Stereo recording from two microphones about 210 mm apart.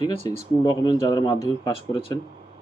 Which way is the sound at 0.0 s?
20° left (ahead or behind).